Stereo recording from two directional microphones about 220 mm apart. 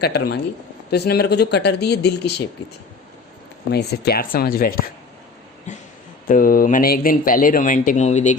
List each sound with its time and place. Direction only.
0.0 s speech: 45° left (ahead or behind)
3.7 s speech: 45° left (ahead or behind)
5.7 s a sound: 35° left (ahead or behind)
6.2 s speech: 40° left (ahead or behind)